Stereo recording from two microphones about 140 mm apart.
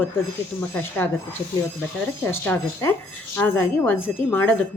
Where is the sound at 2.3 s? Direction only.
15° left (ahead or behind).